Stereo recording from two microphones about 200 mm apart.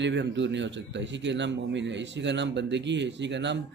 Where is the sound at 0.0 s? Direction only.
65° right (ahead or behind).